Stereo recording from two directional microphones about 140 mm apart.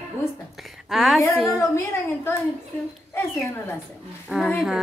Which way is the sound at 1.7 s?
20° left (ahead or behind).